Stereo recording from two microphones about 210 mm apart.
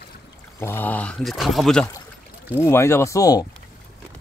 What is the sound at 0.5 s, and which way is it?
Speech, 10° left (ahead or behind).